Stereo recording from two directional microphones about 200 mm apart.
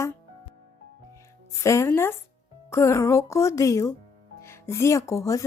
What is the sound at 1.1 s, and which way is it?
Speech, 15° left (ahead or behind).